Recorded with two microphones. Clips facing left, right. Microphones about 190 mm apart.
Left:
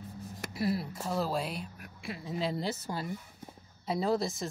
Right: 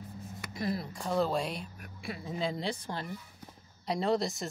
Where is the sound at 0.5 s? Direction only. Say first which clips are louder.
Left 2 dB; 5° left (ahead or behind).